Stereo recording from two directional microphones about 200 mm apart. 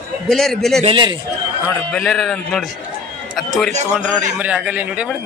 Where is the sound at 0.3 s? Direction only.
Centre (ahead or behind).